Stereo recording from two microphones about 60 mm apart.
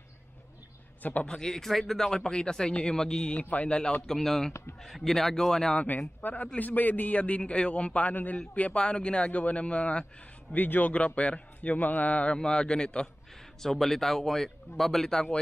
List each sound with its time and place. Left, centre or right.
1.2 s speech: centre
4.0 s speech: centre
4.5 s speech: left
4.8 s speech: centre
5.8 s a man's voice: left
10.5 s a man's voice: left
10.9 s a man's voice: centre